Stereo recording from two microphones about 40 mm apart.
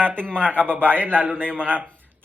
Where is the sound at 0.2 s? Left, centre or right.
Left.